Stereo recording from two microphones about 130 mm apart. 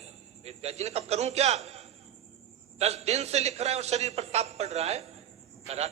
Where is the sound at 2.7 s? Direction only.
55° right (ahead or behind).